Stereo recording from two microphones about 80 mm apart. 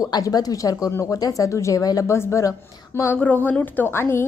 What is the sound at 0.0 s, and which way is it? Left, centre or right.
Speech, left.